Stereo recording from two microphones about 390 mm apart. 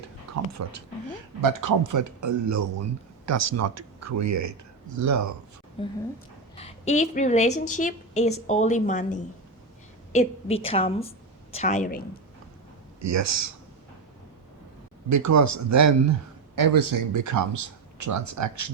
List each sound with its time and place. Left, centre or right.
0.3 s a sound: right
1.4 s speech: right
5.8 s a woman's voice: centre
13.0 s speech: right
15.1 s speech: right
16.6 s speech: right